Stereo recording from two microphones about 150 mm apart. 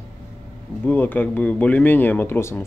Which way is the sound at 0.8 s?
15° left (ahead or behind).